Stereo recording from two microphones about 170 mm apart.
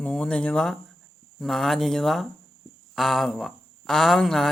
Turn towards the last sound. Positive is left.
turn(degrees=0)  # may be behind; listen again after turning